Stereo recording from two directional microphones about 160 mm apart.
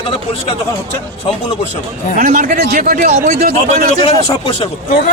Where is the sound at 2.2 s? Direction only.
60° right (ahead or behind).